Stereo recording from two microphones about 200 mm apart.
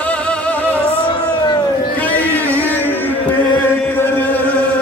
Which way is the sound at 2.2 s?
10° left (ahead or behind).